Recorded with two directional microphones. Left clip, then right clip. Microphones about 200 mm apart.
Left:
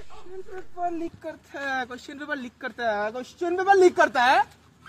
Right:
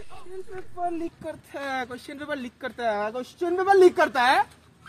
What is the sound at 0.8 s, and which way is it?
Speech, 10° right (ahead or behind).